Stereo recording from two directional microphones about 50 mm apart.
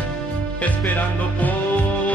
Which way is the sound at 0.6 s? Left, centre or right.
Left.